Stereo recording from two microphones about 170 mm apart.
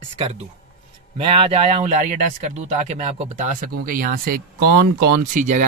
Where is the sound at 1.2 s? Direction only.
35° right (ahead or behind).